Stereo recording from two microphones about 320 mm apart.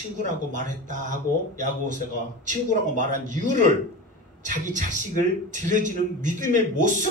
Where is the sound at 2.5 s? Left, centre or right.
Right.